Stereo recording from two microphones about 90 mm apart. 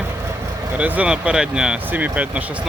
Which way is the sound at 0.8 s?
15° right (ahead or behind).